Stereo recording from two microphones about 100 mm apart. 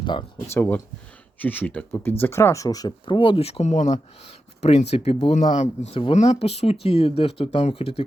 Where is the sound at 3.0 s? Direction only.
55° left (ahead or behind); by 3.6 s 75° left (ahead or behind).